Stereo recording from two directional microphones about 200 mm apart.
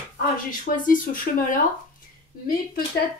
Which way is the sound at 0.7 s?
45° left (ahead or behind).